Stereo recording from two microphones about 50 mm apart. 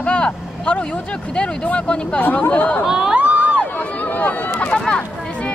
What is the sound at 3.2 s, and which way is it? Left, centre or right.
Crowd, right.